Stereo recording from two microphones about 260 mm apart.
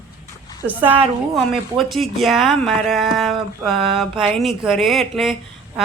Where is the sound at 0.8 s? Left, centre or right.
Right.